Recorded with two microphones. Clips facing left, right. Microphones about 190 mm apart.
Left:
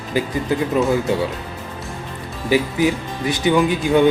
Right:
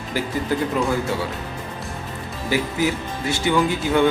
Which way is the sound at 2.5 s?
20° left (ahead or behind).